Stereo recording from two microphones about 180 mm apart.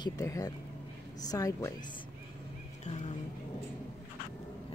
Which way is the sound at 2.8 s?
40° left (ahead or behind).